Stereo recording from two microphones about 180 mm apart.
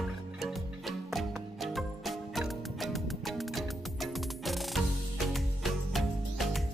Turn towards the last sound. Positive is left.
turn(degrees=0)  # may be behind; listen again after turning